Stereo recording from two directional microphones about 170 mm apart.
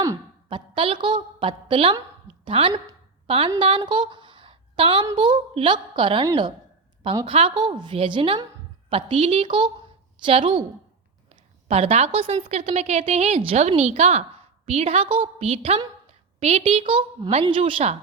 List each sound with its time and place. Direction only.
0.0 s a woman's voice: 25° right (ahead or behind)
7.3 s a woman's voice: 30° right (ahead or behind)
11.7 s a woman's voice: 35° right (ahead or behind)